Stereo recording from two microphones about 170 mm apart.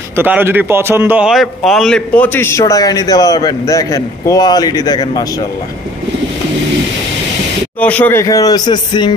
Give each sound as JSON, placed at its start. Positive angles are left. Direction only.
{"t": 0.1, "sound": "a man's voice", "side_deg": -10}
{"t": 7.8, "sound": "a man's voice", "side_deg": 10}